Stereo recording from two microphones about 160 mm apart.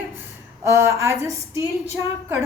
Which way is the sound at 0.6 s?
15° right (ahead or behind).